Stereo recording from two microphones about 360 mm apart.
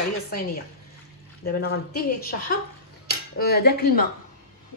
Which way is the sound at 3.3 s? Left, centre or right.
Left.